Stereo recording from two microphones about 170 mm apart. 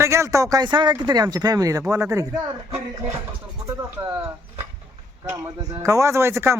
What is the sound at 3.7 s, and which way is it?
Speech, 15° right (ahead or behind).